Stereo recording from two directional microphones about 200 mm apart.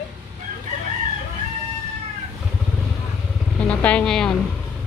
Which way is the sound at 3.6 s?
5° left (ahead or behind).